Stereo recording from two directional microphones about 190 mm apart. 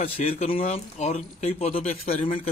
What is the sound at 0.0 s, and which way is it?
A man's voice, 30° left (ahead or behind).